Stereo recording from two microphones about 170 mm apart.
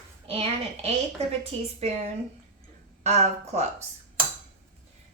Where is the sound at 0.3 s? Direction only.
35° right (ahead or behind).